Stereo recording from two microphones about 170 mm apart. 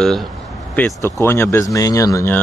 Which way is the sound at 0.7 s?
15° left (ahead or behind).